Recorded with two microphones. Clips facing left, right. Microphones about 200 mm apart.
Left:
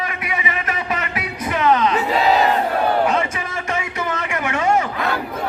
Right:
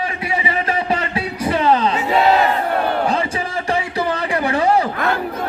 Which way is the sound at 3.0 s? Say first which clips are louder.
Even; 30° right (ahead or behind).